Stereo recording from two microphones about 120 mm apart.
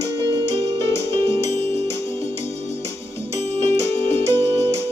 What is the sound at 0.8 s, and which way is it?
Music, 20° left (ahead or behind).